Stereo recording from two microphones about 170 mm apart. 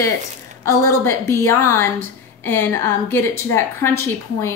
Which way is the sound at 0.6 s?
15° left (ahead or behind).